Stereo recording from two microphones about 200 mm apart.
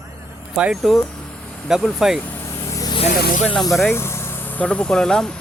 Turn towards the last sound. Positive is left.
turn(degrees=5)  # may be behind; listen again after turning